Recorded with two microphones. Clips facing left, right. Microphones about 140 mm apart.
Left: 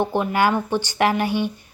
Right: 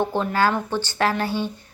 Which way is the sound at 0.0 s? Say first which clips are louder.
Left 1 dB; 15° left (ahead or behind).